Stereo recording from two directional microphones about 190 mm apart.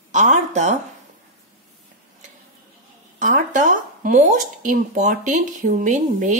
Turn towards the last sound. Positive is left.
turn(degrees=-40)  # may be behind; listen again after turning